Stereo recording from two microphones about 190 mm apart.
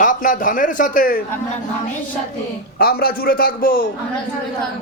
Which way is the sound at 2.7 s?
50° left (ahead or behind).